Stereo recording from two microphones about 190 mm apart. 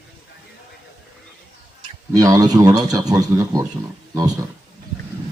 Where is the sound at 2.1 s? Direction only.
20° right (ahead or behind).